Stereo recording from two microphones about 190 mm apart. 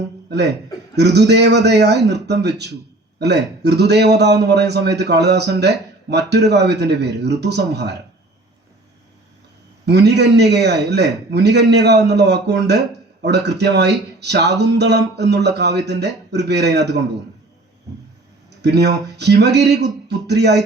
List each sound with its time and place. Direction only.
0.3 s a man's voice: 60° right (ahead or behind)
9.8 s a man's voice: 60° right (ahead or behind)
18.6 s a man's voice: 60° right (ahead or behind)